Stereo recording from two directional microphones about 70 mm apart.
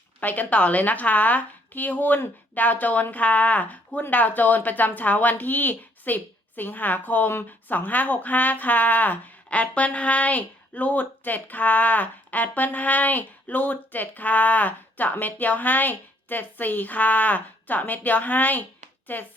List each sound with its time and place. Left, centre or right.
0.2 s a woman's voice: left